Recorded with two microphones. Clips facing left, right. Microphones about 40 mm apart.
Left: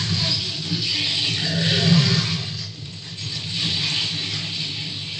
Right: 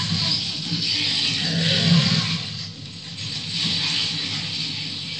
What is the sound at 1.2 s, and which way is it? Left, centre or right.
Music, centre.